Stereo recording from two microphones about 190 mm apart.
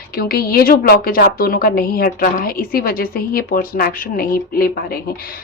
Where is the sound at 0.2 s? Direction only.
55° left (ahead or behind).